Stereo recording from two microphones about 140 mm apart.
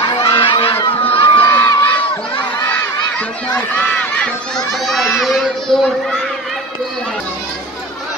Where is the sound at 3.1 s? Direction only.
10° left (ahead or behind).